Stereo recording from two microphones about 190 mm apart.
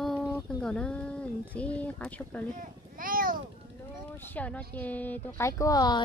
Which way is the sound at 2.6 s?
45° right (ahead or behind).